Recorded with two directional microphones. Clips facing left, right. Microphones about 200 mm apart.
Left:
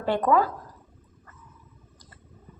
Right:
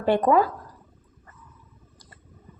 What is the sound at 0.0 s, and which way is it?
Speech, 15° right (ahead or behind).